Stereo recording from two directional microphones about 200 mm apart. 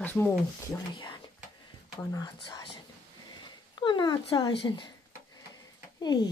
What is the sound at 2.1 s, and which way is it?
Speech, 20° left (ahead or behind).